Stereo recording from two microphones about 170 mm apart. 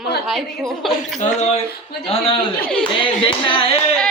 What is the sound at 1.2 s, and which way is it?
Speech, 40° left (ahead or behind).